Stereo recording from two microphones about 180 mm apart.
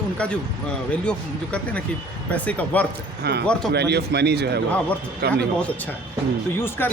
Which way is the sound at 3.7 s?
65° right (ahead or behind).